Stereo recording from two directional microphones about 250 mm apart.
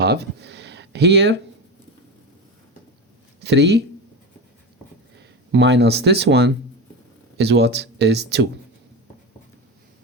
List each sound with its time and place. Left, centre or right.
0.0 s speech: right
3.4 s speech: right
5.5 s speech: right